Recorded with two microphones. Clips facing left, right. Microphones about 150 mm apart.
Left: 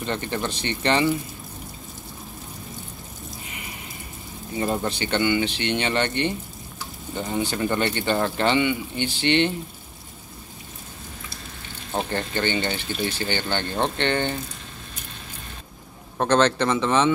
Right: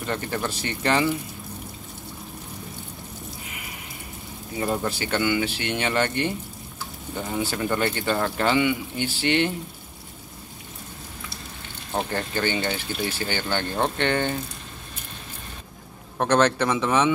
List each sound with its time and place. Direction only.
0.0 s speech: 5° right (ahead or behind)
4.6 s speech: 5° right (ahead or behind)
11.9 s speech: 5° right (ahead or behind)
16.2 s speech: 10° right (ahead or behind)